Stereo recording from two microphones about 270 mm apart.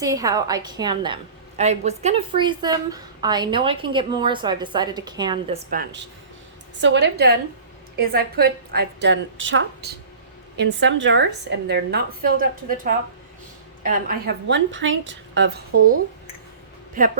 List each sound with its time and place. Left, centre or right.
0.0 s a woman's voice: centre; by 16.0 s right
17.0 s a woman's voice: right